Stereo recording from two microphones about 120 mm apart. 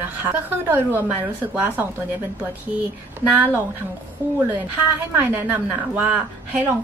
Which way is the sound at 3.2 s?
15° right (ahead or behind).